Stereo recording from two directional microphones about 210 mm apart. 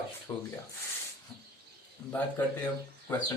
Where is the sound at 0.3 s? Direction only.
15° left (ahead or behind).